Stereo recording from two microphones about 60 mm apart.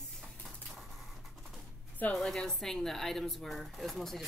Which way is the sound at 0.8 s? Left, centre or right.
Centre.